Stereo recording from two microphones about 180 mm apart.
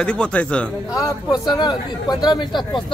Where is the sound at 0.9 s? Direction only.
20° left (ahead or behind).